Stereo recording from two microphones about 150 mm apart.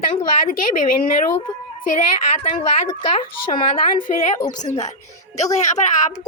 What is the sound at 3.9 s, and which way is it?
Speech, 55° left (ahead or behind).